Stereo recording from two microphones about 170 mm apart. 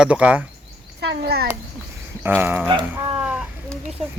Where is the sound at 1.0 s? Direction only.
75° right (ahead or behind).